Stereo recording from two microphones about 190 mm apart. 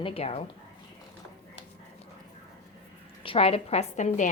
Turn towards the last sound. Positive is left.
turn(degrees=40)  # may be behind; listen again after turning